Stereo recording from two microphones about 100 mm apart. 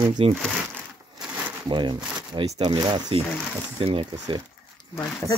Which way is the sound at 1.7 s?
50° right (ahead or behind).